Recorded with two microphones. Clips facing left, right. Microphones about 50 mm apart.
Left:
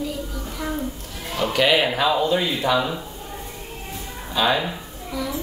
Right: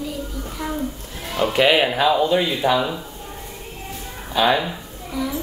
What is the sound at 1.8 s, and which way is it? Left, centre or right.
Speech, centre.